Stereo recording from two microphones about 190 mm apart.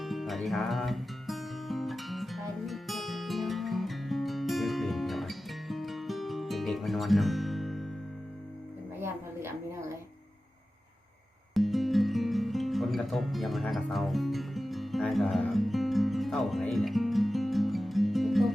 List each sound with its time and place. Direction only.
0.0 s music: centre (ahead or behind)
9.0 s music: 15° right (ahead or behind)
11.5 s music: centre (ahead or behind)